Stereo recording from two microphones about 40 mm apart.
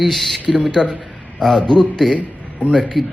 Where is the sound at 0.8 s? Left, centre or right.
Centre.